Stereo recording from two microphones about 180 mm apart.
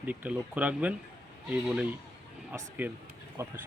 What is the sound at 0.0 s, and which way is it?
A man's voice, 10° right (ahead or behind).